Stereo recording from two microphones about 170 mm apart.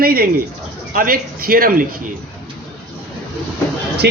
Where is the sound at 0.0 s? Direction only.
60° right (ahead or behind).